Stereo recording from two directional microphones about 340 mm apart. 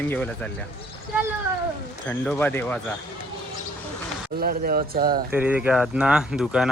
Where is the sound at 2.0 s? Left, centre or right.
Centre.